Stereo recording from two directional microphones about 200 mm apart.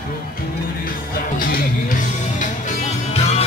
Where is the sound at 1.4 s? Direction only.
45° left (ahead or behind).